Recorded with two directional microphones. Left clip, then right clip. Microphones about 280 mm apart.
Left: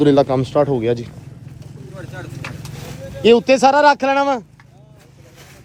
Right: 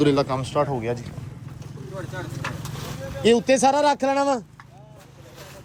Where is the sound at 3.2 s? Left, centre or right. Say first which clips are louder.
Left 6 dB; centre.